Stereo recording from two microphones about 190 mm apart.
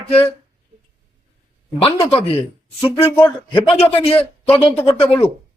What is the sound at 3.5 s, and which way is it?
Speech, 25° left (ahead or behind).